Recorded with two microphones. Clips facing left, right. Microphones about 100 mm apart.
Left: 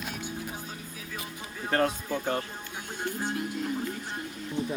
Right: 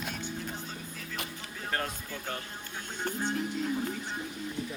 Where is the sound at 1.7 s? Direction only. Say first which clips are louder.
Left 9 dB; 60° left (ahead or behind).